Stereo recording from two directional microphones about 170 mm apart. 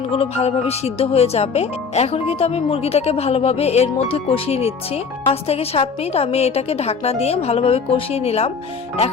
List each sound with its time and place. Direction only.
0.1 s speech: 35° left (ahead or behind)